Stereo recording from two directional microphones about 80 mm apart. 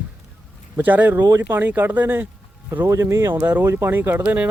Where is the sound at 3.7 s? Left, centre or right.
Right.